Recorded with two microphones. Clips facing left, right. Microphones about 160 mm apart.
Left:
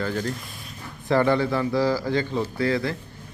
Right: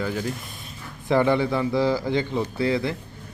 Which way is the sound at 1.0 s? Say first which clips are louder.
Even; 15° right (ahead or behind).